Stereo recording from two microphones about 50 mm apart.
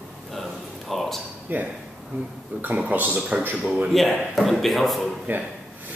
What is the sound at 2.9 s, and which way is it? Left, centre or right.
Speech, right.